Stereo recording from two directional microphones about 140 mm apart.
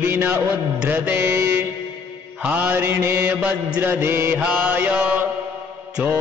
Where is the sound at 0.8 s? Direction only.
15° right (ahead or behind).